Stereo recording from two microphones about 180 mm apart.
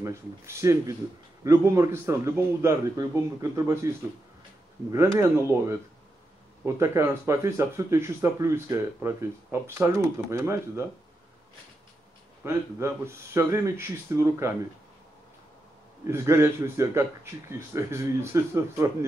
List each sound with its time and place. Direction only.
0.0 s speech: 15° right (ahead or behind)
4.9 s speech: 15° right (ahead or behind)
12.4 s speech: 15° right (ahead or behind)
16.1 s speech: 15° right (ahead or behind)